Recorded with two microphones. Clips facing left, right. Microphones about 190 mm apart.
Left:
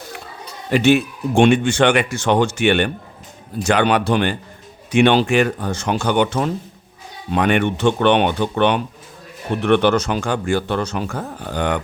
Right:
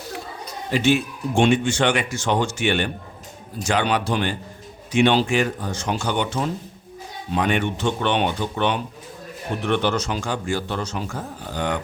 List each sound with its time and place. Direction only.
0.7 s speech: 65° left (ahead or behind)